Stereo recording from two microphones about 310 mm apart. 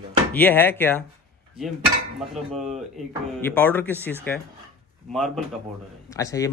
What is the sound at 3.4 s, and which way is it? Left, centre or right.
A man's voice, centre.